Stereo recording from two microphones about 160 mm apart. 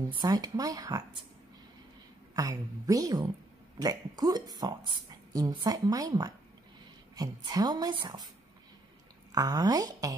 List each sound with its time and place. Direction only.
0.1 s speech: 25° right (ahead or behind)
2.3 s speech: 20° right (ahead or behind)
9.3 s speech: 25° right (ahead or behind)